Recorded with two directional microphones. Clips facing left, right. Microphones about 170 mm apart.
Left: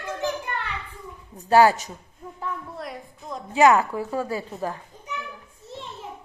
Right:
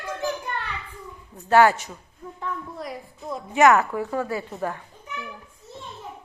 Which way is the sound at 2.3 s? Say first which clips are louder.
Even; centre (ahead or behind).